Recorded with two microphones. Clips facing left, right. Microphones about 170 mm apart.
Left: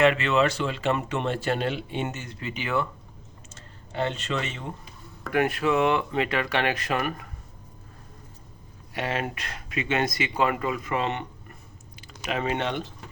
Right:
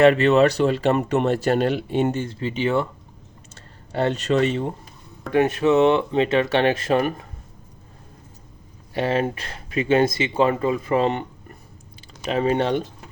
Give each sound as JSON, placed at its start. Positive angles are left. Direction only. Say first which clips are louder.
{"t": 0.0, "sound": "speech", "louder": "right 7 dB", "side_deg": -35}
{"t": 3.5, "sound": "speech", "louder": "right 6 dB", "side_deg": -40}
{"t": 5.3, "sound": "speech", "louder": "right 6 dB", "side_deg": -25}
{"t": 9.0, "sound": "speech", "louder": "right 7 dB", "side_deg": -30}